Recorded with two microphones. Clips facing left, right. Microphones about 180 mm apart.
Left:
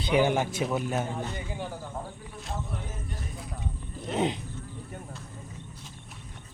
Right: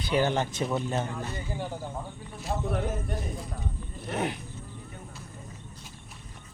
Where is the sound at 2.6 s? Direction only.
70° right (ahead or behind).